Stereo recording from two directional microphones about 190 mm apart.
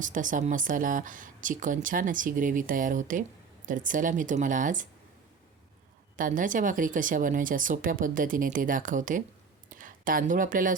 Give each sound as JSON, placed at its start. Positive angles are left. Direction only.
{"t": 0.0, "sound": "speech", "side_deg": -45}
{"t": 6.1, "sound": "speech", "side_deg": -45}